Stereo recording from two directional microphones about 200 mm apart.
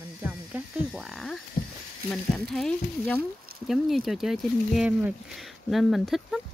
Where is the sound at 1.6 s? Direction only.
45° left (ahead or behind).